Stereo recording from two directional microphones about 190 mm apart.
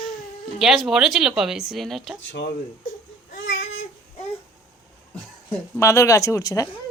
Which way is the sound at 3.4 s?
90° left.